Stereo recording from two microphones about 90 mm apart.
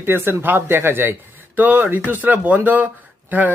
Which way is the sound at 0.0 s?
25° right (ahead or behind).